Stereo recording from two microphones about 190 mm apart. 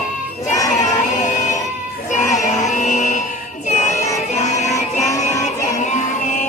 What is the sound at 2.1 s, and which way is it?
Music, 40° left (ahead or behind).